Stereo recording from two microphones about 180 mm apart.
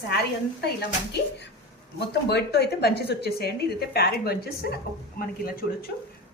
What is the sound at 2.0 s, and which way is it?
Speech, 65° left (ahead or behind).